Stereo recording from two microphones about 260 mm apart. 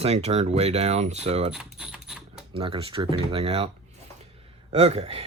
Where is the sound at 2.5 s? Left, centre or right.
Centre.